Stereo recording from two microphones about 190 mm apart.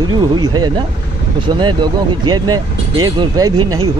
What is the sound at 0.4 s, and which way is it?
Speech, 25° right (ahead or behind).